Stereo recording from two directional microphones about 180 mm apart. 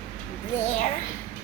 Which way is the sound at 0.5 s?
40° left (ahead or behind).